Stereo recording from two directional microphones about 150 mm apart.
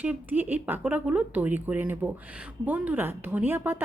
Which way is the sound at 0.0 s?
10° right (ahead or behind).